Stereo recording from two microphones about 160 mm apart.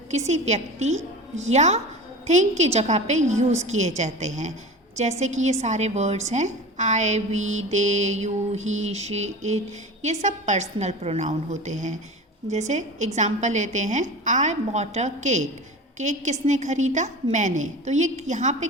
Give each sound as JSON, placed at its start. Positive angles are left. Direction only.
{"t": 0.3, "sound": "a woman's voice", "side_deg": -45}